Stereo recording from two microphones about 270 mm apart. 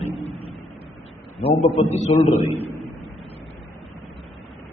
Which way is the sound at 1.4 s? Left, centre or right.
Left.